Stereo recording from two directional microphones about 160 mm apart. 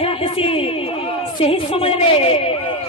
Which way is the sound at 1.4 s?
35° left (ahead or behind).